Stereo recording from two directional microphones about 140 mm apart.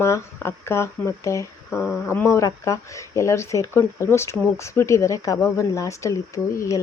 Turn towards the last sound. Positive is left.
turn(degrees=20)  # may be behind; listen again after turning